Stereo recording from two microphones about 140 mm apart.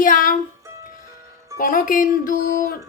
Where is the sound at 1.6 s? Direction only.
80° left.